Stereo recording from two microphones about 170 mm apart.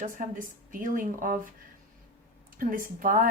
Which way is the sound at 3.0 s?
50° right (ahead or behind).